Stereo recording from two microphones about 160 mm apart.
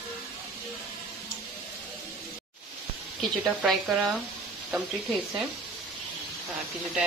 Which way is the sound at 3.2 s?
Centre (ahead or behind).